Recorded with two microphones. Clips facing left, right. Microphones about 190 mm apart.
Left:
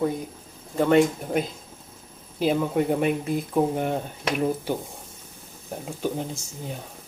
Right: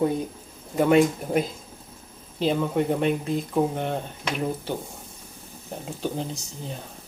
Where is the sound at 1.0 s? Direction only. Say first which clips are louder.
Even; centre (ahead or behind).